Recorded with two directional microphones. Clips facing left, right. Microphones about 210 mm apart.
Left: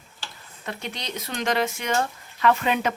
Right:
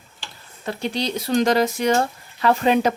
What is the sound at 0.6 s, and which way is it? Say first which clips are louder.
Speech: right 9 dB; 35° right (ahead or behind).